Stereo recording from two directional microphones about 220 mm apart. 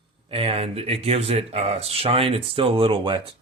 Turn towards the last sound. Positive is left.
turn(degrees=-20)  # may be behind; listen again after turning